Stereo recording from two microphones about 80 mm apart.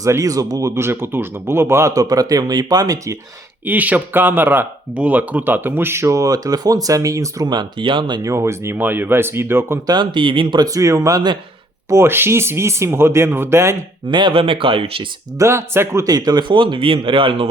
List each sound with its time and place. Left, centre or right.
0.0 s speech: right
0.7 s speech: right
2.0 s speech: right
3.7 s speech: centre; by 7.5 s right
7.5 s speech: right
8.2 s speech: right
8.8 s speech: right
9.8 s speech: right
10.7 s speech: right
14.1 s speech: right
15.4 s speech: right
16.0 s speech: right